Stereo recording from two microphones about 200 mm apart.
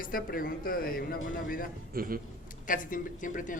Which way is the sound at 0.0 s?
45° left (ahead or behind).